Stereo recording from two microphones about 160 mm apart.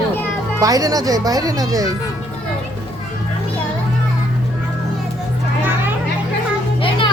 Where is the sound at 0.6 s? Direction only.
20° right (ahead or behind).